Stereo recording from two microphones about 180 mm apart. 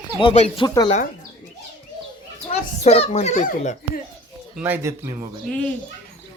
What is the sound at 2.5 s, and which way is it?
A child's voice, 35° left (ahead or behind).